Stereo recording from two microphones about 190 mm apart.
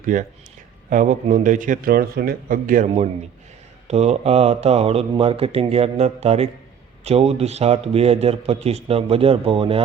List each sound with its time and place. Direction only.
0.0 s a man's voice: 45° right (ahead or behind)